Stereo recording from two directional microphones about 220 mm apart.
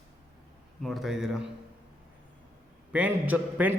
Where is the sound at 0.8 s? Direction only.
Centre (ahead or behind).